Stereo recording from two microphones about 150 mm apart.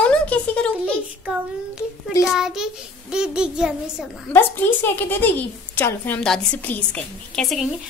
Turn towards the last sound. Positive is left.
turn(degrees=5)  # may be behind; listen again after turning